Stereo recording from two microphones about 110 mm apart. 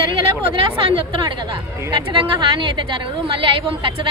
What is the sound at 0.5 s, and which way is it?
A woman's voice, 55° right (ahead or behind).